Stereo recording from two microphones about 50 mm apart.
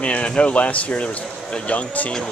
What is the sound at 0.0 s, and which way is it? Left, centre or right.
Speech, left.